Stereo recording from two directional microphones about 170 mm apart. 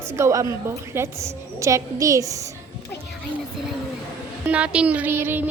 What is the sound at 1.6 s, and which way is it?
Speech, 20° right (ahead or behind).